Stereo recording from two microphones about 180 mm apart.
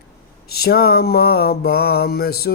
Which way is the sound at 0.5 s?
60° left (ahead or behind).